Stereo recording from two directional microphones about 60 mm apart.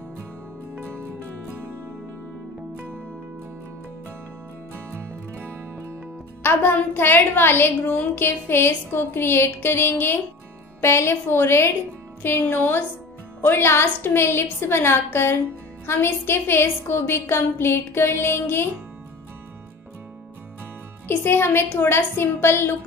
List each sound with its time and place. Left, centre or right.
6.4 s a woman's voice: left
21.1 s a woman's voice: left